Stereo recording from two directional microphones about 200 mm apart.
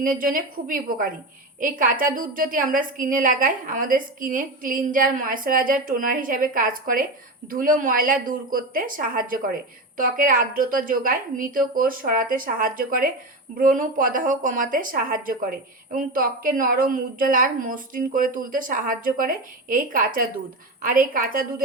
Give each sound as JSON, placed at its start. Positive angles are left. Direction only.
{"t": 0.0, "sound": "a woman's voice", "side_deg": -45}